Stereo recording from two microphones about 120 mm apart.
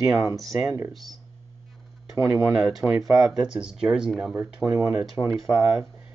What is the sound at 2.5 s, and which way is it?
Speech, centre (ahead or behind).